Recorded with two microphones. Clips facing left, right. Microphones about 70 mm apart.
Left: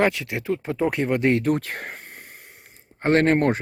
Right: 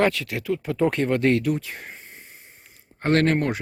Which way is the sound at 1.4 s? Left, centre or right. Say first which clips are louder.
Left 3 dB; left.